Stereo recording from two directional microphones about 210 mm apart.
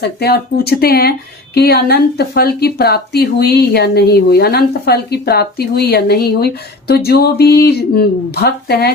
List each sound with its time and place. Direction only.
0.0 s speech: 50° left (ahead or behind)